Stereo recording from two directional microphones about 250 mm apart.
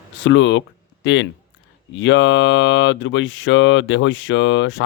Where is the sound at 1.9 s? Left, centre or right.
Left.